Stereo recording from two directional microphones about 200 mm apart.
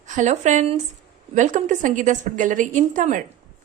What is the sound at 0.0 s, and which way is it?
Speech, 40° right (ahead or behind).